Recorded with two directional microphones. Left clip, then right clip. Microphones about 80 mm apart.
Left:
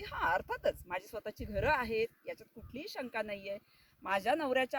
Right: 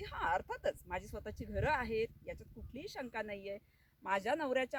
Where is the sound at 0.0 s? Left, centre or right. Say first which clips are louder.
Left 3 dB; right.